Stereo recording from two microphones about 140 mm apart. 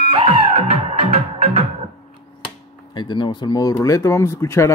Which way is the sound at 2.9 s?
35° left (ahead or behind).